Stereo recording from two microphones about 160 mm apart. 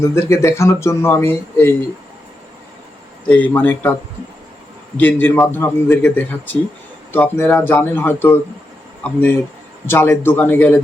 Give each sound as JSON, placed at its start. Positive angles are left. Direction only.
{"t": 0.0, "sound": "speech", "side_deg": 15}
{"t": 3.2, "sound": "speech", "side_deg": 10}
{"t": 4.9, "sound": "speech", "side_deg": 10}
{"t": 9.8, "sound": "speech", "side_deg": 15}